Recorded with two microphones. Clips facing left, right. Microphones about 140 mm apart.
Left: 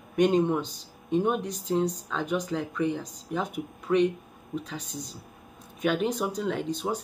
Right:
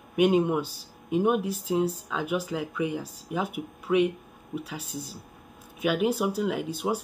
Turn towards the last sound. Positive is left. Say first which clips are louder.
# right 1 dB
turn(degrees=-10)  # may be behind; listen again after turning